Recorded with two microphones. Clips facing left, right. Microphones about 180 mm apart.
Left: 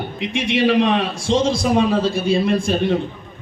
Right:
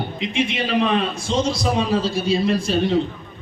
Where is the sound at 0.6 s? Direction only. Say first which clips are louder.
Left 5 dB; 75° left (ahead or behind); by 3.0 s 55° left (ahead or behind).